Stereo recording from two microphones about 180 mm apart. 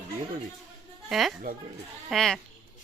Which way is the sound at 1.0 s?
Centre (ahead or behind).